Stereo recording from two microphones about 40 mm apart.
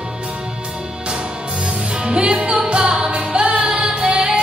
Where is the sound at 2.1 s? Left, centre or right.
Right.